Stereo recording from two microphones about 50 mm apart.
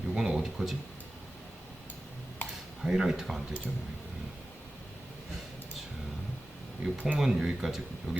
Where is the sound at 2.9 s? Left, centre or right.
Centre.